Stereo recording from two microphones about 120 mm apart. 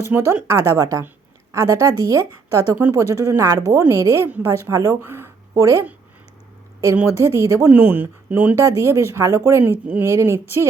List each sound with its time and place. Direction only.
0.1 s a woman's voice: 20° right (ahead or behind)